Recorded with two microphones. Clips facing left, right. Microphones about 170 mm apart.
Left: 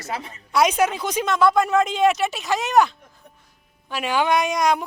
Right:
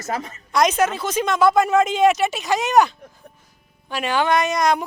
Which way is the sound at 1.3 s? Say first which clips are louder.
Right 2 dB; 5° right (ahead or behind).